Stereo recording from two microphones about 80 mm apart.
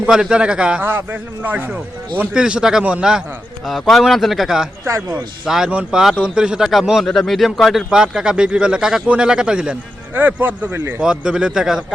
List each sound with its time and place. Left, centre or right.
0.0 s speech: centre
0.8 s a man's voice: right
2.3 s speech: centre
3.7 s a man's voice: centre
10.2 s a man's voice: right
11.0 s speech: centre